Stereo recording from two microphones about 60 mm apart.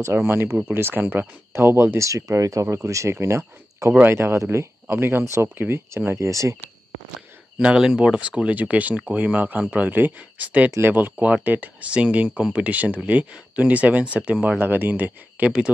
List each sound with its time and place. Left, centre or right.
0.1 s speech: right
1.5 s speech: right
2.0 s speech: right
2.6 s speech: right
5.2 s speech: right
6.1 s speech: right
7.5 s speech: centre